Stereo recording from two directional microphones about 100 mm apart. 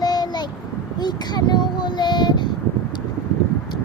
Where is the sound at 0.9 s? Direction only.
45° left (ahead or behind).